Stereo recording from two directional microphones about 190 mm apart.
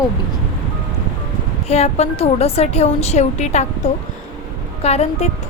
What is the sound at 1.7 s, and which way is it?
A woman's voice, 35° left (ahead or behind).